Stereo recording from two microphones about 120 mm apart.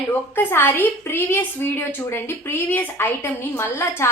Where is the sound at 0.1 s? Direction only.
20° left (ahead or behind).